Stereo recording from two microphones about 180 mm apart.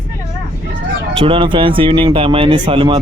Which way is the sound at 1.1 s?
30° right (ahead or behind).